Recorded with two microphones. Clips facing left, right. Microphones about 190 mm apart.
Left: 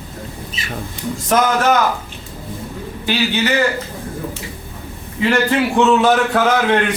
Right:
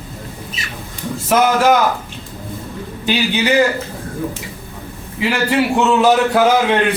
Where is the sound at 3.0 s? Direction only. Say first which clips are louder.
Right 1 dB; 15° right (ahead or behind).